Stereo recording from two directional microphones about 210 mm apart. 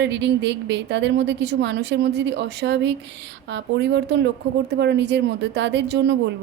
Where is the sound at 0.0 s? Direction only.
55° right (ahead or behind).